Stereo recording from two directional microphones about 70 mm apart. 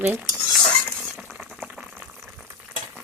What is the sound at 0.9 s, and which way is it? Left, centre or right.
Stir, centre.